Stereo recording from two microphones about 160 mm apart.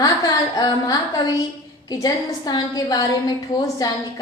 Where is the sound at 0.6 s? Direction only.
25° left (ahead or behind).